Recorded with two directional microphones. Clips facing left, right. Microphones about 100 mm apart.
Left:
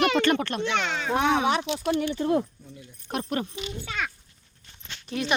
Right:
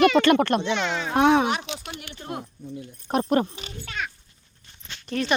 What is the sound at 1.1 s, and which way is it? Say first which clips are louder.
Speech: right 3 dB; 60° right (ahead or behind).